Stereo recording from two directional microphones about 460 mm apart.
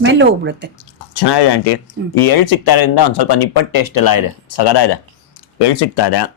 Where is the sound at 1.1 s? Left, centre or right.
Left.